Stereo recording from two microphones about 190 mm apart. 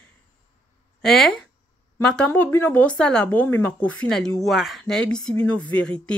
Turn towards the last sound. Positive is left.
turn(degrees=5)  # may be behind; listen again after turning